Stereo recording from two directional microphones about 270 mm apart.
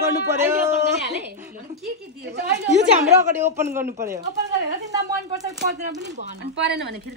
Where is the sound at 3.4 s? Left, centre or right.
Centre.